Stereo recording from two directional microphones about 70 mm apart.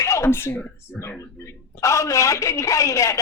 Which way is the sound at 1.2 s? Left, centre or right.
Left.